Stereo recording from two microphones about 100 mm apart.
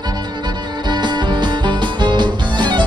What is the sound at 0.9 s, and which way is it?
Music, 45° right (ahead or behind).